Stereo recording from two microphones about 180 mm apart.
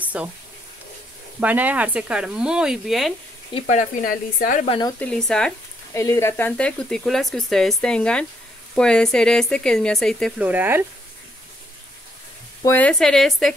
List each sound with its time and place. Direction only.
0.0 s a sound: 10° right (ahead or behind)
1.4 s speech: 10° right (ahead or behind)
3.5 s speech: 40° left (ahead or behind)
4.6 s speech: 25° left (ahead or behind)
4.9 s speech: 5° left (ahead or behind)
5.9 s speech: 15° left (ahead or behind)
10.4 s speech: 10° right (ahead or behind)
12.6 s speech: 10° left (ahead or behind)